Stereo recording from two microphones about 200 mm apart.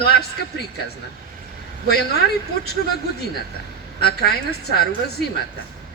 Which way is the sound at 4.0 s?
55° left (ahead or behind).